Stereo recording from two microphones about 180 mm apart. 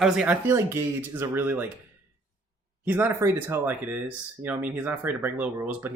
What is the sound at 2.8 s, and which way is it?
Speech, 10° right (ahead or behind).